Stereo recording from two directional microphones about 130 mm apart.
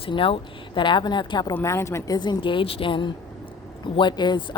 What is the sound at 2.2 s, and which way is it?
Speech, 35° left (ahead or behind).